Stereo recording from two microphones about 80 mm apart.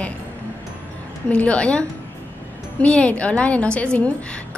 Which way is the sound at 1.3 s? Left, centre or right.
Centre.